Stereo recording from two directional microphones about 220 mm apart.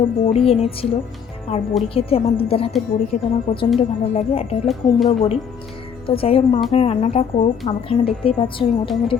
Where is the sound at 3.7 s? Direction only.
30° left (ahead or behind).